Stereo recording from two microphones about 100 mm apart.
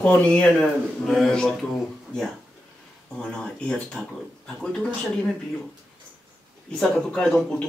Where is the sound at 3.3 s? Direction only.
10° left (ahead or behind).